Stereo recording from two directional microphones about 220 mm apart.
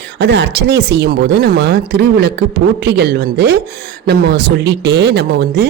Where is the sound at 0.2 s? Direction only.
50° right (ahead or behind).